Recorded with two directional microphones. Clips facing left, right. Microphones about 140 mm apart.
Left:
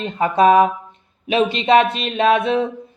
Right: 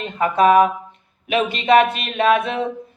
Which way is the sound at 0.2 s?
25° left (ahead or behind).